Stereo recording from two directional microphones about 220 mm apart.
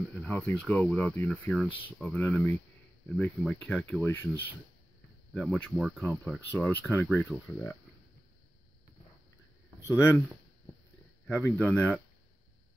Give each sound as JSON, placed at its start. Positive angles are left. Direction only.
{"t": 0.1, "sound": "speech", "side_deg": 5}
{"t": 5.3, "sound": "speech", "side_deg": 0}
{"t": 9.8, "sound": "speech", "side_deg": 10}
{"t": 11.2, "sound": "speech", "side_deg": 5}